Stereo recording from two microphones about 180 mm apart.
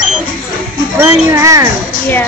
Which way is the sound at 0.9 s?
15° right (ahead or behind).